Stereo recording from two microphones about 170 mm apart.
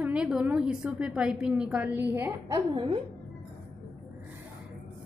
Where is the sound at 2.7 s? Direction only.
30° right (ahead or behind).